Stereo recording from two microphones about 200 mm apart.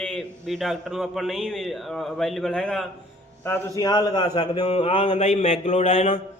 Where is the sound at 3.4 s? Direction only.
15° left (ahead or behind); by 6.2 s 35° left (ahead or behind).